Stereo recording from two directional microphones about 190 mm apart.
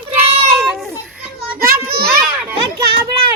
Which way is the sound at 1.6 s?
50° right (ahead or behind).